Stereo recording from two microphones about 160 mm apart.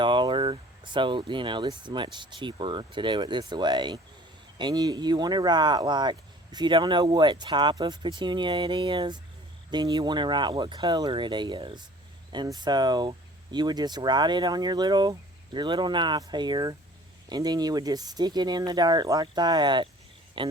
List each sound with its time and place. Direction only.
0.0 s speech: 30° right (ahead or behind)